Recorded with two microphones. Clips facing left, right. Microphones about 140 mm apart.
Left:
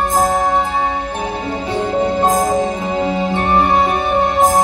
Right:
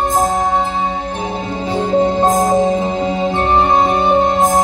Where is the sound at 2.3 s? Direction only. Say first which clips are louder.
Right 3 dB; 25° right (ahead or behind).